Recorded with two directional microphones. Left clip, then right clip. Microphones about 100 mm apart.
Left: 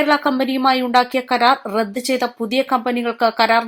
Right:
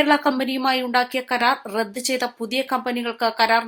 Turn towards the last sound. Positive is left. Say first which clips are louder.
# left 4 dB
turn(degrees=40)  # may be behind; listen again after turning